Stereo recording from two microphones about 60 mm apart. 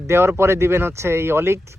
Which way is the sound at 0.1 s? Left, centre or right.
Right.